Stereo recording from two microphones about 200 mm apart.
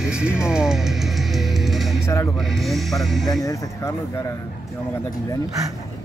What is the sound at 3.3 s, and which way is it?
Speech, 15° left (ahead or behind).